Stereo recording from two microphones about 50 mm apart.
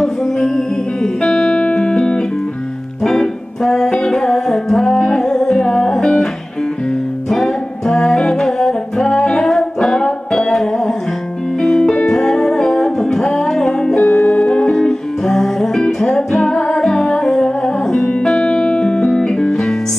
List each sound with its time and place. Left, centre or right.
1.0 s music: centre
3.0 s music: centre
7.2 s music: centre